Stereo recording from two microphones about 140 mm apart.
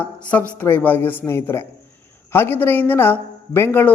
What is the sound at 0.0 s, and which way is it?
A woman's voice, 10° left (ahead or behind).